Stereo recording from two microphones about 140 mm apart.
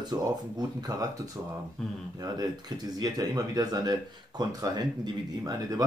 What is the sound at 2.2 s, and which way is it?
Speech, 30° right (ahead or behind).